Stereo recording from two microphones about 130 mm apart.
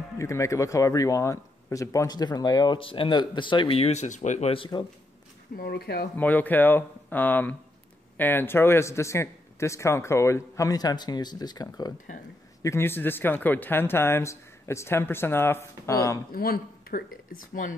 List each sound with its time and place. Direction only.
0.2 s speech: 20° left (ahead or behind); by 4.6 s 60° left (ahead or behind)
4.6 s speech: 35° left (ahead or behind)
6.1 s speech: 15° left (ahead or behind); by 11.9 s 30° left (ahead or behind)
12.6 s speech: 20° left (ahead or behind)
16.3 s speech: 90° left